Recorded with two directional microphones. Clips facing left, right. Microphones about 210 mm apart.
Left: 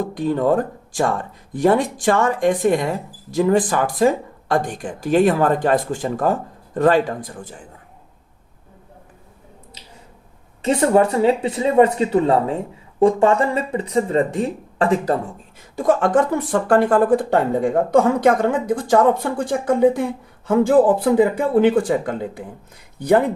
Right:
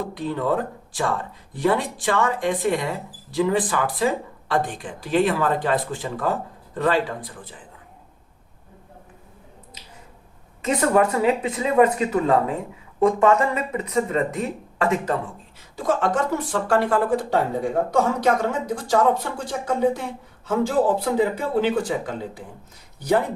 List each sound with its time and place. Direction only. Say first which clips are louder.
0.0 s speech: left 6 dB; 45° left (ahead or behind)
10.6 s a woman's voice: left 4 dB; 30° left (ahead or behind)
15.7 s speech: left 6 dB; 50° left (ahead or behind)